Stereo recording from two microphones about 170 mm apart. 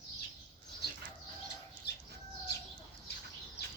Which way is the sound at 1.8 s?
70° left (ahead or behind).